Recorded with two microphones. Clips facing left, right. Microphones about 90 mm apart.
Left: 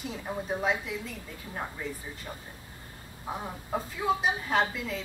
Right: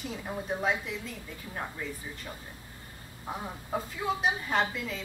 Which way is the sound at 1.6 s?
10° left (ahead or behind).